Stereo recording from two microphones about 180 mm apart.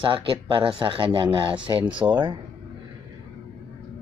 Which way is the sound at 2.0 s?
15° right (ahead or behind).